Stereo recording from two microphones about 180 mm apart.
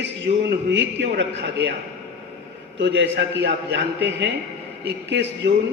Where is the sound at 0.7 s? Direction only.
75° right (ahead or behind).